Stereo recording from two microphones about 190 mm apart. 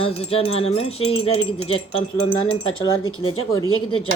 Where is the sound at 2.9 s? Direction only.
90° left.